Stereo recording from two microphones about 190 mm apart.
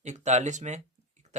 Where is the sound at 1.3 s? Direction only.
40° right (ahead or behind).